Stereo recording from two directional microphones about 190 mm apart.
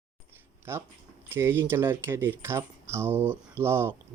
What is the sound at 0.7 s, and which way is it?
Speech, 10° right (ahead or behind).